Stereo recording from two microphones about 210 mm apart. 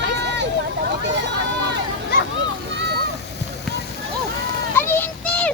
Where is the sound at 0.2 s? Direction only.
55° right (ahead or behind).